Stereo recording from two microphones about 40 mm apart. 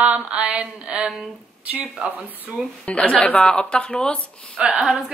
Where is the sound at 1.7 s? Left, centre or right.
Right.